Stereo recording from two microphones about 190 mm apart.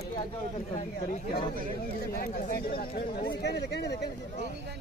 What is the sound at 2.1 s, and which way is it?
Speech, 50° left (ahead or behind).